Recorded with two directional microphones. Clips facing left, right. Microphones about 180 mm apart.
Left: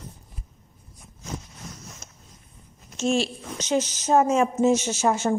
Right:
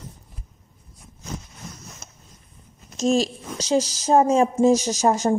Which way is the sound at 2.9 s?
35° right (ahead or behind).